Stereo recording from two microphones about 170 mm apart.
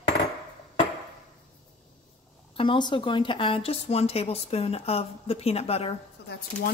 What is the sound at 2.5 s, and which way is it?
Speech, 30° left (ahead or behind).